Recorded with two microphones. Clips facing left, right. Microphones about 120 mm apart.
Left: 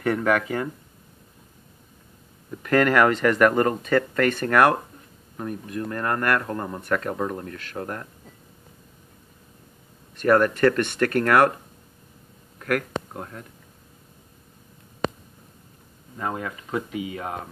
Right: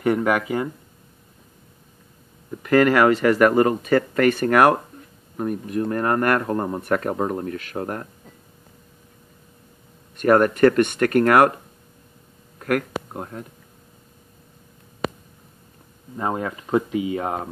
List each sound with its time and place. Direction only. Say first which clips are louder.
0.0 s speech: right 2 dB; 15° right (ahead or behind)
2.6 s speech: right 3 dB; 5° right (ahead or behind); by 8.1 s 30° right (ahead or behind)
10.1 s speech: right 2 dB; 15° right (ahead or behind)
12.6 s speech: right 2 dB; 10° right (ahead or behind)
13.1 s speech: right 4 dB; 20° right (ahead or behind)
15.0 s a sound: even; 5° right (ahead or behind)
16.2 s speech: right 4 dB; 30° right (ahead or behind)